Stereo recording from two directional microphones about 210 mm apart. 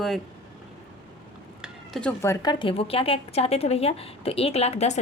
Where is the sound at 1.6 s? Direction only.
Centre (ahead or behind).